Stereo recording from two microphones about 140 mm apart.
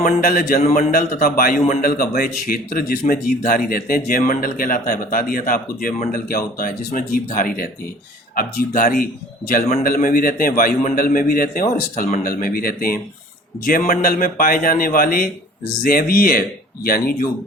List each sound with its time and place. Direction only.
0.0 s a man's voice: 90° left
1.6 s a man's voice: 70° left (ahead or behind); by 13.0 s 90° left
13.7 s a man's voice: 75° left (ahead or behind); by 17.2 s 90° left